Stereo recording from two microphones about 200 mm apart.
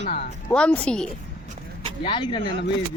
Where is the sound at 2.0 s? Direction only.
25° left (ahead or behind).